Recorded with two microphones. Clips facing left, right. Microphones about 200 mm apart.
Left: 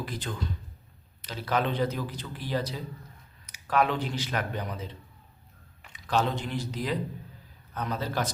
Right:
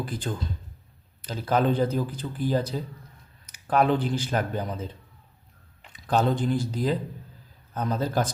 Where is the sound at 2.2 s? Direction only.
35° right (ahead or behind).